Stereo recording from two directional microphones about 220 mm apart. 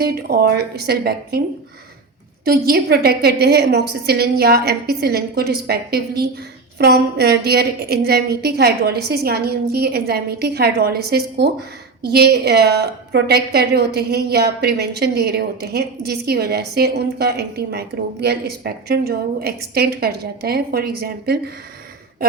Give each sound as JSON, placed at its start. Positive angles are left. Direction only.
{"t": 0.0, "sound": "a woman's voice", "side_deg": -45}
{"t": 2.4, "sound": "a woman's voice", "side_deg": -45}